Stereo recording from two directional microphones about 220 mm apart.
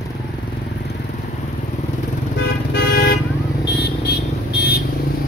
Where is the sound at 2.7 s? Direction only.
45° left (ahead or behind).